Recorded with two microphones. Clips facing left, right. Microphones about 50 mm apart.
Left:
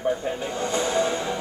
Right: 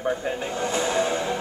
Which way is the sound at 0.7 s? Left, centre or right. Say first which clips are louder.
Even; centre.